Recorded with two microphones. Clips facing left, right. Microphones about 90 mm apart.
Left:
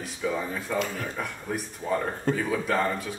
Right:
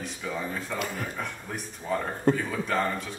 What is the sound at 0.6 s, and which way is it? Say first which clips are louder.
Speech: left 3 dB; centre (ahead or behind).